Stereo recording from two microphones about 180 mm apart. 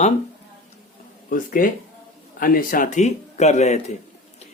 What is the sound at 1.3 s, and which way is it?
Speech, 50° left (ahead or behind).